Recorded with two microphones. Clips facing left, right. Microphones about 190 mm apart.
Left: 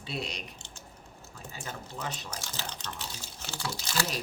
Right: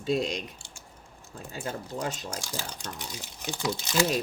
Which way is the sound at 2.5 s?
10° right (ahead or behind).